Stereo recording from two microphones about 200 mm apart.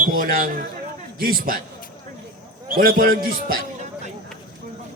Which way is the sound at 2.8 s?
45° right (ahead or behind).